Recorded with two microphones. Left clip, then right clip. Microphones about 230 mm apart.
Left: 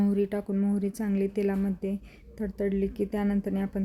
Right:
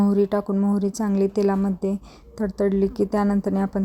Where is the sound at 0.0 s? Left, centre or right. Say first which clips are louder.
Right 7 dB; centre.